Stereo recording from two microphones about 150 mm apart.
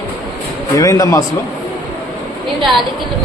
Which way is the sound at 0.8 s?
20° left (ahead or behind).